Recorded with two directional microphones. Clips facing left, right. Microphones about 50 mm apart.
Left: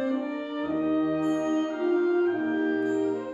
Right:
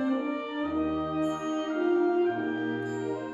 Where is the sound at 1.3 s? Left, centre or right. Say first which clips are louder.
Left 4 dB; centre.